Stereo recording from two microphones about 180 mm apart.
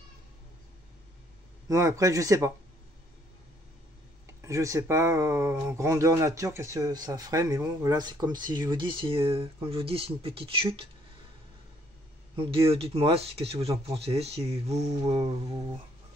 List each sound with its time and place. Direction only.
1.7 s speech: 15° right (ahead or behind)
4.5 s speech: 15° right (ahead or behind)
12.4 s speech: 30° right (ahead or behind)